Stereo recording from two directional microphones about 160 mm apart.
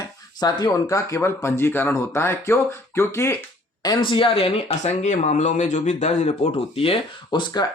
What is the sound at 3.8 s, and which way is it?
Speech, 30° left (ahead or behind).